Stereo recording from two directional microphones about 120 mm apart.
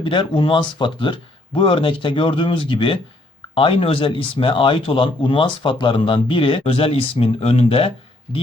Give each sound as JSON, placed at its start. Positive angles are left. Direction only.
{"t": 0.0, "sound": "speech", "side_deg": 40}